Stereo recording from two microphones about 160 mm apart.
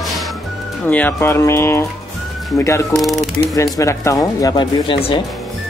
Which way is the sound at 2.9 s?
Centre (ahead or behind).